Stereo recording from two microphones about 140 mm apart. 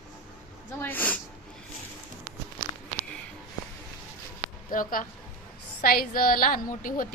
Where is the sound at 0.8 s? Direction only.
10° left (ahead or behind).